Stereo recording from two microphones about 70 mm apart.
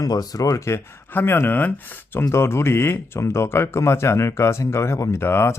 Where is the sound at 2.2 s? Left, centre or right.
Left.